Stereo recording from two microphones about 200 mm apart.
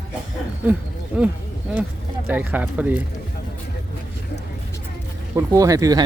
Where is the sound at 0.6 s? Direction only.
5° right (ahead or behind).